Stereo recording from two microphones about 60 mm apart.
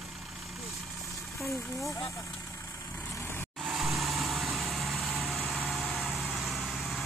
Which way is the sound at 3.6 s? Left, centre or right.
Centre.